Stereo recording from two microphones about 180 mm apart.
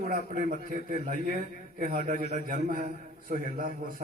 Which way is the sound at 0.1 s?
50° right (ahead or behind).